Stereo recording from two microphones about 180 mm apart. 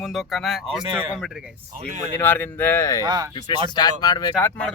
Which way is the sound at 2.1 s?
10° left (ahead or behind).